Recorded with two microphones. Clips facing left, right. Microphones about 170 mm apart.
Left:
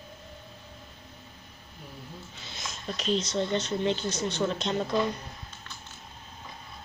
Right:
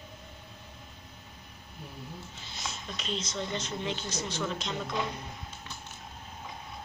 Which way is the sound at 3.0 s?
35° left (ahead or behind).